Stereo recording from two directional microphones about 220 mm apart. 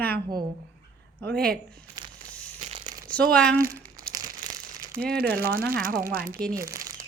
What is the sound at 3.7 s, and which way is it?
Crumpling, 40° right (ahead or behind).